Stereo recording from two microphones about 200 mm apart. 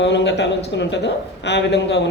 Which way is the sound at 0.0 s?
60° left (ahead or behind).